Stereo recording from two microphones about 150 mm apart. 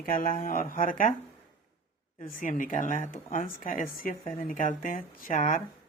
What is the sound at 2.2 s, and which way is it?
Speech, 65° left (ahead or behind).